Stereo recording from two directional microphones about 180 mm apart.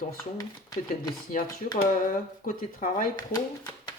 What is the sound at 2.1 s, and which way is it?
Speech, 50° left (ahead or behind).